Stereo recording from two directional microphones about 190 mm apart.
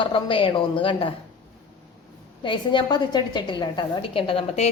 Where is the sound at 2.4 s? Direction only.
25° left (ahead or behind).